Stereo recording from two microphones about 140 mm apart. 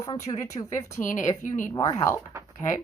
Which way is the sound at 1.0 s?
65° left (ahead or behind).